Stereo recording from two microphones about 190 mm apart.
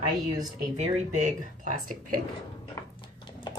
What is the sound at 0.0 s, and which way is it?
Speech, 30° right (ahead or behind).